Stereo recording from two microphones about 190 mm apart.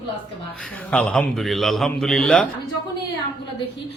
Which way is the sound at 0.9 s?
5° left (ahead or behind).